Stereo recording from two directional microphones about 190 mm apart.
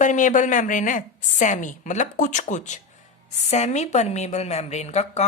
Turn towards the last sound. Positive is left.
turn(degrees=35)  # may be behind; listen again after turning